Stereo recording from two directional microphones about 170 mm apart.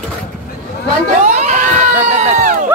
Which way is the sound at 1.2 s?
45° right (ahead or behind).